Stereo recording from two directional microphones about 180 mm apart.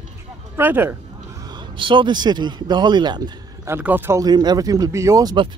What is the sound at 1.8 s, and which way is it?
A man's voice, 25° right (ahead or behind).